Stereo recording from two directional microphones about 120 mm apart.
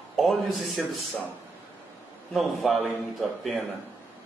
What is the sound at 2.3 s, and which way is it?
Speech, centre (ahead or behind).